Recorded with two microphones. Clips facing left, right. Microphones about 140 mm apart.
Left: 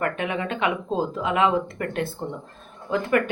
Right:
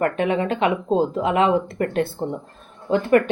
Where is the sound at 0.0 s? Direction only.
30° right (ahead or behind).